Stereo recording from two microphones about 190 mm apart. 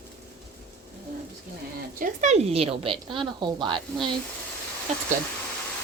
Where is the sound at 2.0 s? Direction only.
40° right (ahead or behind).